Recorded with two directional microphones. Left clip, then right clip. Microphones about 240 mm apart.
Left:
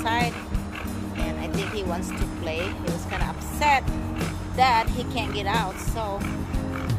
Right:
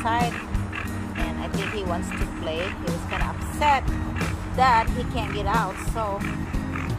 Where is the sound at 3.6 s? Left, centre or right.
Centre.